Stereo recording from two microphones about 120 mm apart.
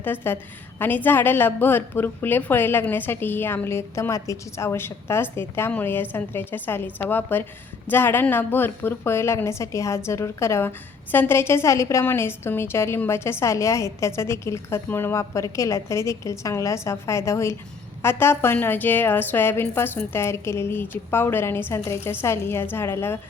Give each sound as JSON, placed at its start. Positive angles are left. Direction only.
{"t": 0.0, "sound": "a woman's voice", "side_deg": 15}